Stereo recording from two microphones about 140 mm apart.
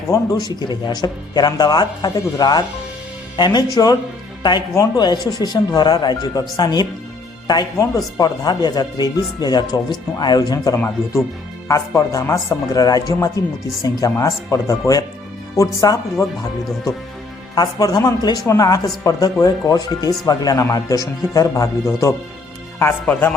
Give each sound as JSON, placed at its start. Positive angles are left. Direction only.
{"t": 0.1, "sound": "speech", "side_deg": 30}
{"t": 10.8, "sound": "speech", "side_deg": 15}
{"t": 17.5, "sound": "speech", "side_deg": 30}